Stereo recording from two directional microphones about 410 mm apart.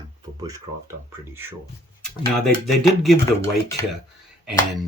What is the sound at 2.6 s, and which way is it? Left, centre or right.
Speech, centre.